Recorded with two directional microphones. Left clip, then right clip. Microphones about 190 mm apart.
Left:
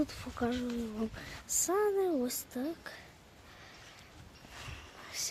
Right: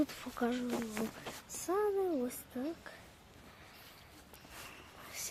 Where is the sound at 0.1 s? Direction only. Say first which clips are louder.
Left 1 dB; 10° right (ahead or behind).